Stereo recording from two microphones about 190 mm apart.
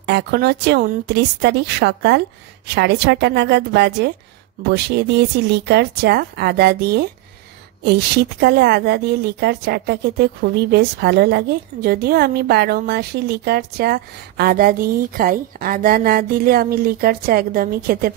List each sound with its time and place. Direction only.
0.0 s speech: 60° right (ahead or behind)